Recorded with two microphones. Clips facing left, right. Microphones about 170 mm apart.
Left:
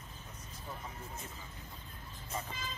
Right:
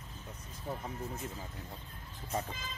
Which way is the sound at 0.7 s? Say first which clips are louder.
Right 7 dB; 50° right (ahead or behind).